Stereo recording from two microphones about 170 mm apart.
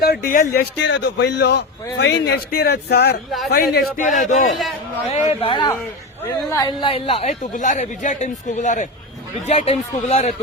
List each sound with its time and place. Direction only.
0.0 s a man's voice: 65° left (ahead or behind)
4.0 s speech: 45° left (ahead or behind)
5.1 s a woman's voice: 35° left (ahead or behind)
7.5 s a woman's voice: 45° left (ahead or behind)